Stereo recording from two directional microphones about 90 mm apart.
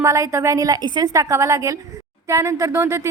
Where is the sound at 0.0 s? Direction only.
35° right (ahead or behind).